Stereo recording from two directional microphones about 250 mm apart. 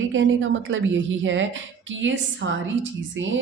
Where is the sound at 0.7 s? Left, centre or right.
Right.